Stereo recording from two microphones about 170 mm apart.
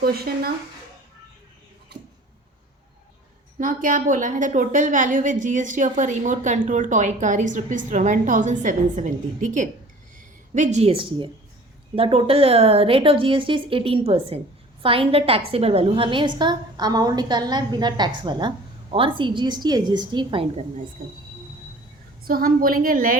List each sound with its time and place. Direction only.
0.0 s a woman's voice: 65° right (ahead or behind)
3.6 s a woman's voice: 50° right (ahead or behind); by 20.8 s 35° right (ahead or behind)
22.2 s a woman's voice: 60° right (ahead or behind)